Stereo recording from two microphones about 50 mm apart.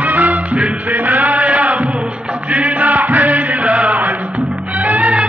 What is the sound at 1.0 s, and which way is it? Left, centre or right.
Chant, right.